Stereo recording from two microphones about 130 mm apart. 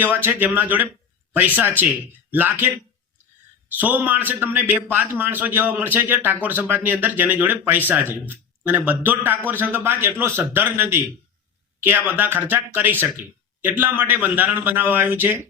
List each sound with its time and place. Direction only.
0.0 s a man's voice: 15° right (ahead or behind)
3.8 s a man's voice: 15° right (ahead or behind)